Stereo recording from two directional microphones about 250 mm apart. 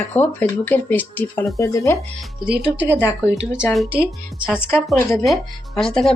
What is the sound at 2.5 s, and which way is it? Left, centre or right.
Speech, centre.